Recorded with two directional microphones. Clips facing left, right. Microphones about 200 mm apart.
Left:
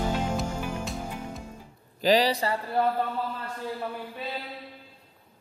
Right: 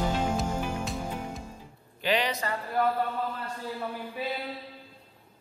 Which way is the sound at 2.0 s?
35° left (ahead or behind).